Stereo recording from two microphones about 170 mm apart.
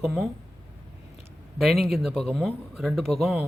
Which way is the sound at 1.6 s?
Centre (ahead or behind).